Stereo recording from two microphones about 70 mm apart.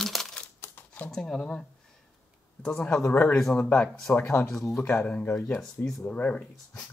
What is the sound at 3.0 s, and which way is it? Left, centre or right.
Speech, left.